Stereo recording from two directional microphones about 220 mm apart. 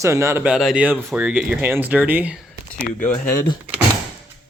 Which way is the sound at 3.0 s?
10° left (ahead or behind).